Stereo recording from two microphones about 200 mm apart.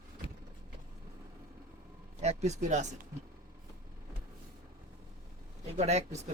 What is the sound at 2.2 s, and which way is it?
Speech, 35° right (ahead or behind).